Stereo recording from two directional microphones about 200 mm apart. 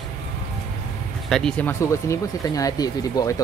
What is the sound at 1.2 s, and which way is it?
Speech, 5° left (ahead or behind).